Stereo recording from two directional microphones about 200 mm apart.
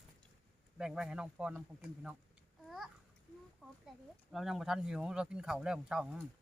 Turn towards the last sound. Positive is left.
turn(degrees=-5)  # may be behind; listen again after turning